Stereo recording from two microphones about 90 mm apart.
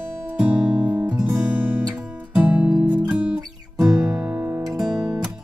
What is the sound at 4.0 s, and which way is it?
Guitar, 15° right (ahead or behind).